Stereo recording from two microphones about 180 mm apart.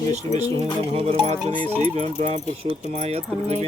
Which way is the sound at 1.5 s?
10° left (ahead or behind).